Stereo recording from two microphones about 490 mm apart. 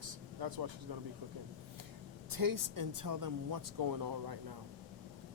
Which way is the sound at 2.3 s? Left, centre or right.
Right.